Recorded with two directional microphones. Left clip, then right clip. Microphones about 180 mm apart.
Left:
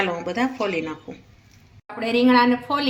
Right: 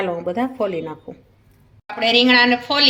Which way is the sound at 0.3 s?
55° right (ahead or behind).